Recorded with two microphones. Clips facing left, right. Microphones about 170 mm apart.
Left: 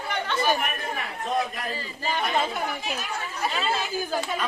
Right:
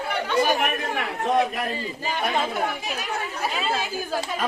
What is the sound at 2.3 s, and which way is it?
Speech, centre (ahead or behind).